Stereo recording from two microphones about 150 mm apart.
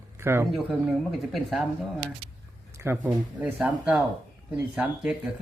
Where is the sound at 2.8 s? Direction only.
15° right (ahead or behind).